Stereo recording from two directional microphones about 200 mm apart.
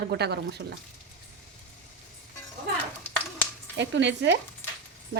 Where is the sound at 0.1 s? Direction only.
55° right (ahead or behind).